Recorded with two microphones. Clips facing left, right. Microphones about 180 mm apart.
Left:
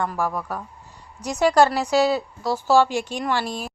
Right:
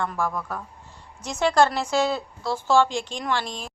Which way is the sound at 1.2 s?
35° left (ahead or behind).